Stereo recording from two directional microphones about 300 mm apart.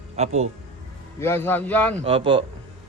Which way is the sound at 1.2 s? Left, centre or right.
Centre.